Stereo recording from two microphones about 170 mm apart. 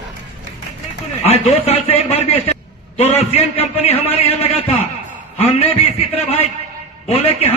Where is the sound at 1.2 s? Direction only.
35° left (ahead or behind).